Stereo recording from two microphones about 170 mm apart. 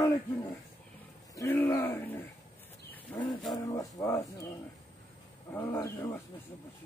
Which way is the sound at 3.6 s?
20° left (ahead or behind).